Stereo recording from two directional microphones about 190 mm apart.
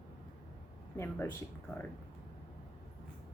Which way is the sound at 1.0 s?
10° left (ahead or behind).